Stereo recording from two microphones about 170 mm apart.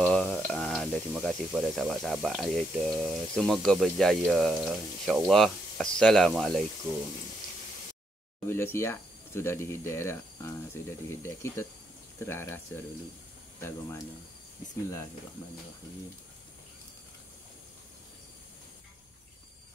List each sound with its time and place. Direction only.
0.0 s a sound: 5° left (ahead or behind)
1.1 s speech: centre (ahead or behind)
8.5 s speech: 15° left (ahead or behind)